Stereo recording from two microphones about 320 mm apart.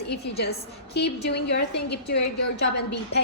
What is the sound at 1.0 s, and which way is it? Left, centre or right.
A woman's voice, left.